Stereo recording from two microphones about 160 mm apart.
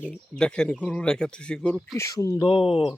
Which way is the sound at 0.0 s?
5° left (ahead or behind).